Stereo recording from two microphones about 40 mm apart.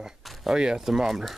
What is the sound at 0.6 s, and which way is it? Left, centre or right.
Speech, centre.